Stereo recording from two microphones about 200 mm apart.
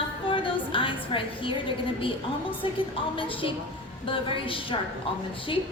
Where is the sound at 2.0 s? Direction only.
25° left (ahead or behind).